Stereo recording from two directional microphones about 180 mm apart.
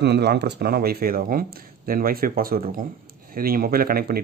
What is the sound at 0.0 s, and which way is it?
Speech, 65° right (ahead or behind).